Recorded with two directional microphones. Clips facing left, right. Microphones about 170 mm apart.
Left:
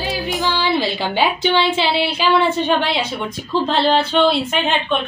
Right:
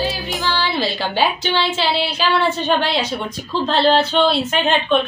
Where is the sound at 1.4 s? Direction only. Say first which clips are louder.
Left 3 dB; 60° left (ahead or behind).